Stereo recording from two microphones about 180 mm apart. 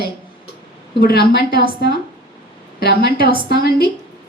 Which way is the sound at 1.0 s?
60° left (ahead or behind).